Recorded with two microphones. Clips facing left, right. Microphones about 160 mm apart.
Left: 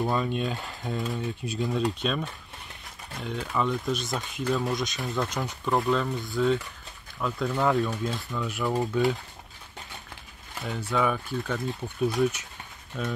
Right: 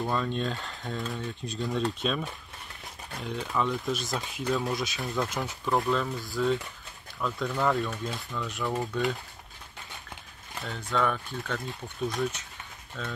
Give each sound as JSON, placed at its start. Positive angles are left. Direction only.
{"t": 0.0, "sound": "speech", "side_deg": 10}
{"t": 10.7, "sound": "speech", "side_deg": 5}